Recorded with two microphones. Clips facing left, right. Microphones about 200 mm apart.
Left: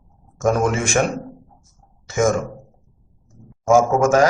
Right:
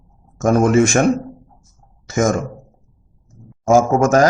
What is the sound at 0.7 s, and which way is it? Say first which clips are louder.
Speech: right 10 dB; 40° right (ahead or behind).